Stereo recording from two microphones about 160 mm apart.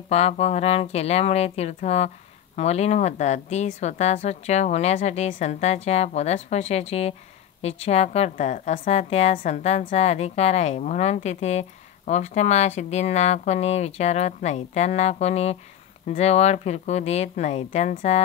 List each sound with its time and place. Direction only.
0.1 s a woman's voice: 40° left (ahead or behind)